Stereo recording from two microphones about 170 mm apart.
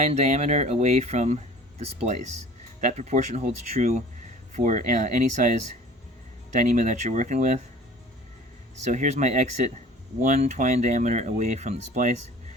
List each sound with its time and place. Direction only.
0.0 s speech: 40° right (ahead or behind)
8.9 s speech: 45° right (ahead or behind)